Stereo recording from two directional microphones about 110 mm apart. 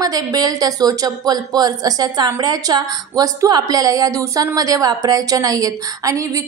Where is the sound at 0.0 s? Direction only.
35° right (ahead or behind).